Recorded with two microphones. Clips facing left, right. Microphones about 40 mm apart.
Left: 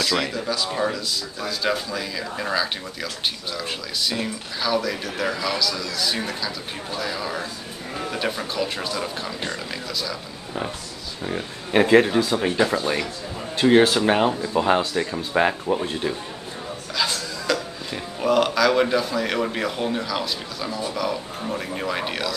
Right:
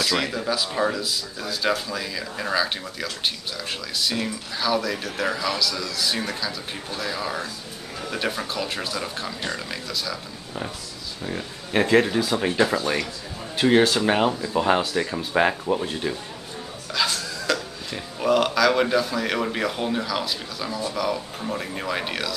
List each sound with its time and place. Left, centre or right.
0.0 s speech: centre
11.2 s speech: centre
12.2 s speech: centre